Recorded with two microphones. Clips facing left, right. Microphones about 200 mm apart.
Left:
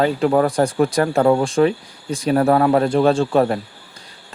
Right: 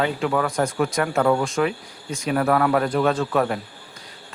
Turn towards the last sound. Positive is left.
turn(degrees=30)  # may be behind; listen again after turning